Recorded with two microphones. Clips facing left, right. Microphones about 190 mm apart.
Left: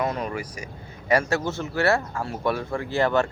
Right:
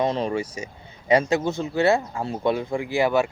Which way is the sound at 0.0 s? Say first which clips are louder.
Right 4 dB; 25° right (ahead or behind).